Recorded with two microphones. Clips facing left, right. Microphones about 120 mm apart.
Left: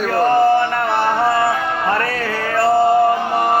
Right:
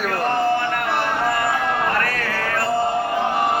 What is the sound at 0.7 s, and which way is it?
Music, 30° left (ahead or behind).